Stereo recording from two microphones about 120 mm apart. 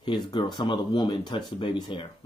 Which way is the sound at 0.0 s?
40° left (ahead or behind).